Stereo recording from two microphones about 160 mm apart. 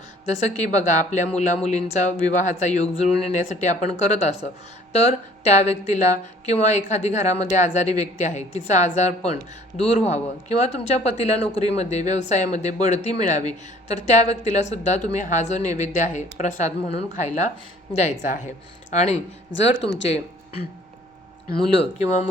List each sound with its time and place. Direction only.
0.3 s speech: 45° left (ahead or behind)
21.8 s speech: 45° left (ahead or behind)